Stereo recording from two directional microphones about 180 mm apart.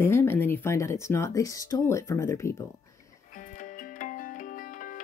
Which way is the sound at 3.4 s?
45° left (ahead or behind).